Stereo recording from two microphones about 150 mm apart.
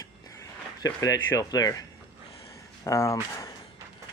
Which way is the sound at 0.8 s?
25° left (ahead or behind).